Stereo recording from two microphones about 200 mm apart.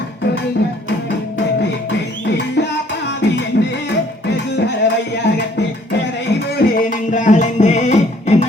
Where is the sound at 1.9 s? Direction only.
60° left (ahead or behind).